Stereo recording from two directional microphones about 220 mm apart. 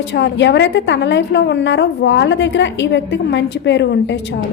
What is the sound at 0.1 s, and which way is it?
A woman's voice, 55° left (ahead or behind).